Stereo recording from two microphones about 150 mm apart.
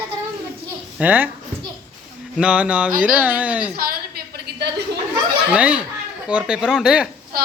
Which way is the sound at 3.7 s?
90° right.